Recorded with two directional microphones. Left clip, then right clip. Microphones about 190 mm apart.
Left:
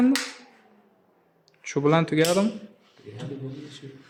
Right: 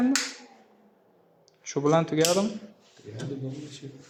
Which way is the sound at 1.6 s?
30° left (ahead or behind).